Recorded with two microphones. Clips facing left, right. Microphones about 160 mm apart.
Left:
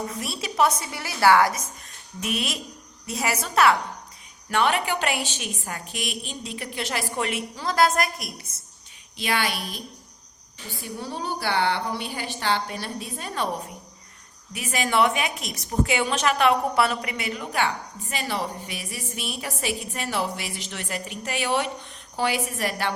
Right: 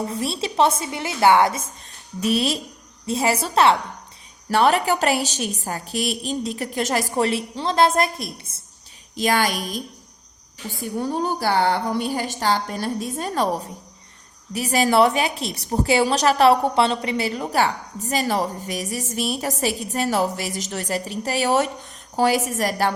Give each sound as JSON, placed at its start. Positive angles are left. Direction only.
{"t": 0.1, "sound": "a woman's voice", "side_deg": -30}
{"t": 4.4, "sound": "a woman's voice", "side_deg": -40}
{"t": 9.1, "sound": "a woman's voice", "side_deg": -40}
{"t": 11.0, "sound": "a woman's voice", "side_deg": -45}